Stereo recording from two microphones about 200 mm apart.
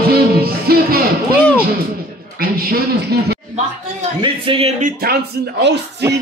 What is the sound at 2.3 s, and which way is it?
A man's voice, 50° right (ahead or behind).